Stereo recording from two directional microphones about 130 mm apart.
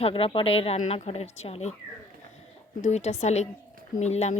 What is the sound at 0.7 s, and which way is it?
Speech, 60° left (ahead or behind).